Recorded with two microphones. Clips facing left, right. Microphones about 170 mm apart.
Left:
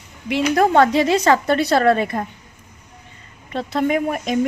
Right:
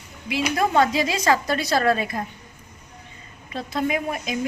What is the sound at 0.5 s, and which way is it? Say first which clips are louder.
Speech: left 5 dB; 70° left (ahead or behind).